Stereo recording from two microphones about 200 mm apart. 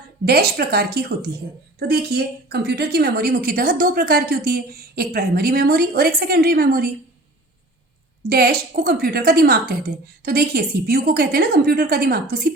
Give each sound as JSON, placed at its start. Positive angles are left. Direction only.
{"t": 0.3, "sound": "a woman's voice", "side_deg": -50}
{"t": 8.3, "sound": "a woman's voice", "side_deg": -50}